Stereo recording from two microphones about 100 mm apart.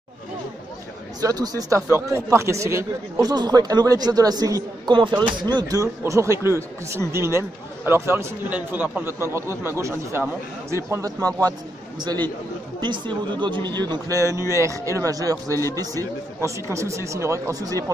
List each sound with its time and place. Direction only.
1.2 s speech: 40° right (ahead or behind)
3.3 s speech: 45° right (ahead or behind)
4.9 s speech: 50° right (ahead or behind)
5.6 s a man's voice: 35° right (ahead or behind)
12.0 s speech: 45° right (ahead or behind)
14.1 s speech: 30° right (ahead or behind)